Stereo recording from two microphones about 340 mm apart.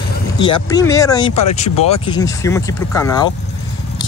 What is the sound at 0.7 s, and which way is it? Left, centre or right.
Speech, centre.